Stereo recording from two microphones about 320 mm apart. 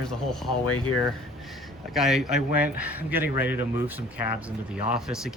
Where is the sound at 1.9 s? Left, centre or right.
Centre.